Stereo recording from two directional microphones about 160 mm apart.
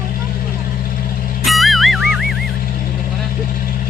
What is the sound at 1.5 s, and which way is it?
Music, centre (ahead or behind).